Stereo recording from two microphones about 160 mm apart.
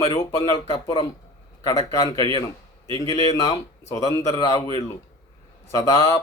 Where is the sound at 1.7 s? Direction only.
20° left (ahead or behind).